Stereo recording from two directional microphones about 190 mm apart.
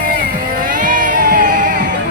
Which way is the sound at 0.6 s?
45° right (ahead or behind).